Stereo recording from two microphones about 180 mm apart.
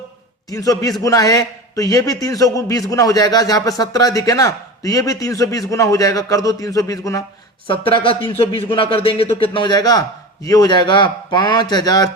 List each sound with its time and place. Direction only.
0.5 s a man's voice: 20° left (ahead or behind)